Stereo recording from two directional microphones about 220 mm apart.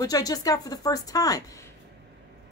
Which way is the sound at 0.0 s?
15° left (ahead or behind).